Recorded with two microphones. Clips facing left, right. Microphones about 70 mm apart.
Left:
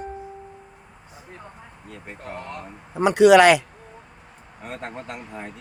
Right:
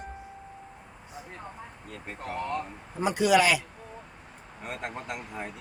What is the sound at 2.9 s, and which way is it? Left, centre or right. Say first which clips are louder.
Speech: left 10 dB; left.